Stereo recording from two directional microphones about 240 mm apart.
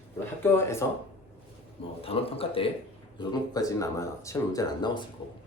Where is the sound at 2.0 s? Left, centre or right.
Left.